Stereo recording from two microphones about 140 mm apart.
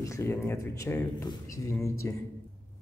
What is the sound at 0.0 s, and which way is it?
A man's voice, 20° left (ahead or behind).